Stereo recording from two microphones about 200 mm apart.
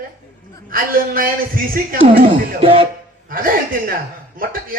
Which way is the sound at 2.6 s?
25° right (ahead or behind).